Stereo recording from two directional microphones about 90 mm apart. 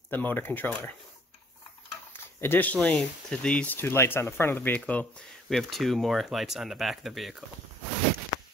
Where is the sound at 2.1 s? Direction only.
25° left (ahead or behind).